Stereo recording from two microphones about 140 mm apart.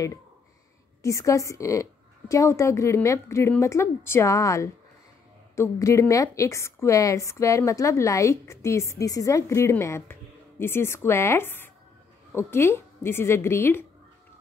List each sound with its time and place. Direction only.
1.0 s a woman's voice: 20° left (ahead or behind)